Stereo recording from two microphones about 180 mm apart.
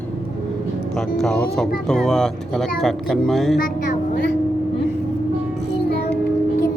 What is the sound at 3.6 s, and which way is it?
Music, 60° left (ahead or behind).